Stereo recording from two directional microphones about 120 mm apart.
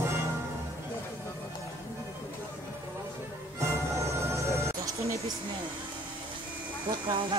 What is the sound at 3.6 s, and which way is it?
Music, 25° right (ahead or behind).